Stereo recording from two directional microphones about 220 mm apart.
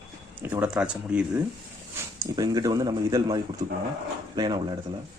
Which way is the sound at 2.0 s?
15° right (ahead or behind).